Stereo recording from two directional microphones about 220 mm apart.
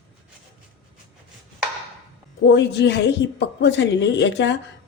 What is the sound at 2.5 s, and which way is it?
A woman's voice, 50° left (ahead or behind).